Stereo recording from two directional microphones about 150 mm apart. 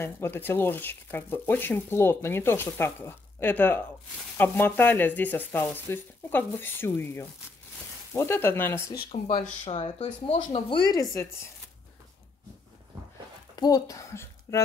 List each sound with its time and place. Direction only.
0.0 s speech: 15° left (ahead or behind)
9.4 s speech: 40° left (ahead or behind); by 11.2 s 25° left (ahead or behind)
13.6 s speech: 25° left (ahead or behind)